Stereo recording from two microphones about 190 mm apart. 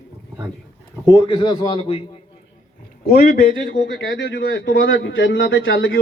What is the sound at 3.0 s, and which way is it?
Speech, 50° left (ahead or behind).